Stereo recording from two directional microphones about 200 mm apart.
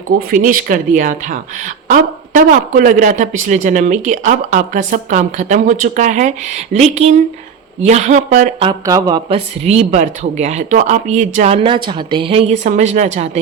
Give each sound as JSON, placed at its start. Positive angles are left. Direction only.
{"t": 0.2, "sound": "speech", "side_deg": -45}
{"t": 8.6, "sound": "speech", "side_deg": -20}